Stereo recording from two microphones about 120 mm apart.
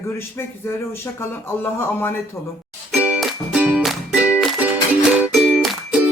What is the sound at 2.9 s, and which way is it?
Music, 10° right (ahead or behind).